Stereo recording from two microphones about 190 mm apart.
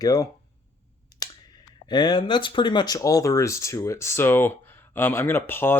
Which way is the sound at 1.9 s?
25° left (ahead or behind).